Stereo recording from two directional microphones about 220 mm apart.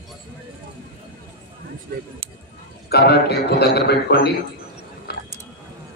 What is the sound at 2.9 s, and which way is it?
A man's voice, 50° left (ahead or behind).